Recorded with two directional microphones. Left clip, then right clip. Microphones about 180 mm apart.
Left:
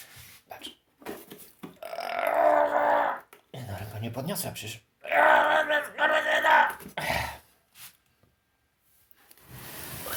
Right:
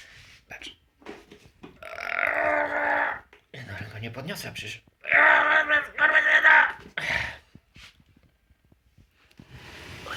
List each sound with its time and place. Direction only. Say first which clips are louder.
0.4 s sneeze: right 2 dB; 20° left (ahead or behind)
1.8 s burping: right 2 dB; 15° left (ahead or behind)
3.5 s groan: right 1 dB; 15° left (ahead or behind)